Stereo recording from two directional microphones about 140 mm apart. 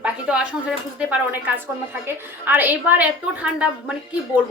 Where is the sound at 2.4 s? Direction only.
15° right (ahead or behind).